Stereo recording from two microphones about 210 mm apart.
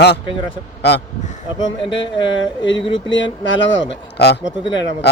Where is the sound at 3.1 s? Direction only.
60° left (ahead or behind).